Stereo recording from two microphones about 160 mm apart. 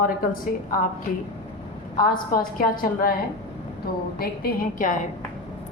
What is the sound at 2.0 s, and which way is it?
A woman's voice, 65° left (ahead or behind).